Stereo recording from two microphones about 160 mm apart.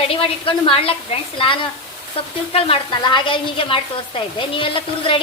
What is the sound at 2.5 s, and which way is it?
Speech, 35° left (ahead or behind).